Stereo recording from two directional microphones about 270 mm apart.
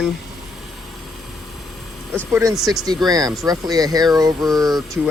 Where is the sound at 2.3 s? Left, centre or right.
Centre.